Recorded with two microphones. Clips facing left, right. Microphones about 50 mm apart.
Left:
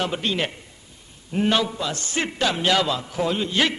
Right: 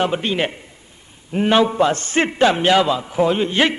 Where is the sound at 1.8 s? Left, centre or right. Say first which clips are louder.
Right 9 dB; right.